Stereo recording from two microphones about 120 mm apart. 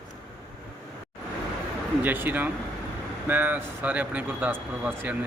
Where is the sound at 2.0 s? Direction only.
15° right (ahead or behind).